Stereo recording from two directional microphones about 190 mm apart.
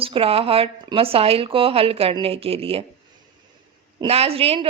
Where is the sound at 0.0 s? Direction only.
30° right (ahead or behind).